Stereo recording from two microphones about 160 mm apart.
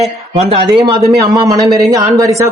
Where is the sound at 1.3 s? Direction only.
20° right (ahead or behind).